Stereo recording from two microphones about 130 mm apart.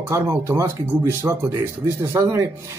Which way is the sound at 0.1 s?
20° right (ahead or behind).